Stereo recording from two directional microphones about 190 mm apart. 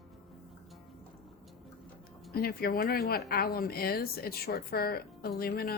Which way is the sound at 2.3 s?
50° left (ahead or behind).